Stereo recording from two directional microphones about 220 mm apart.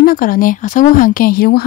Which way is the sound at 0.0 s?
40° left (ahead or behind).